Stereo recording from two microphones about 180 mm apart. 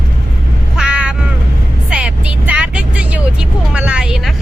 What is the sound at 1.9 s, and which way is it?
Vehicle, 5° right (ahead or behind).